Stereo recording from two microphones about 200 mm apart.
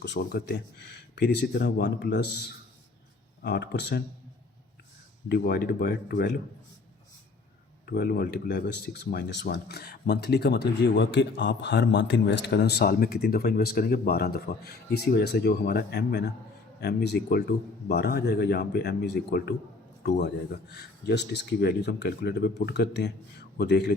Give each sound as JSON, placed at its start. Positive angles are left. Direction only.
{"t": 0.0, "sound": "speech", "side_deg": 55}
{"t": 3.4, "sound": "speech", "side_deg": 55}
{"t": 5.3, "sound": "speech", "side_deg": 50}
{"t": 7.9, "sound": "speech", "side_deg": 50}